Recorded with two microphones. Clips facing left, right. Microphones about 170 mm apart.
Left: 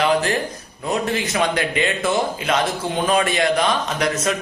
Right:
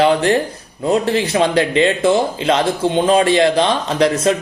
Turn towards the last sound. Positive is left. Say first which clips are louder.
# right 7 dB
turn(degrees=-30)  # may be behind; listen again after turning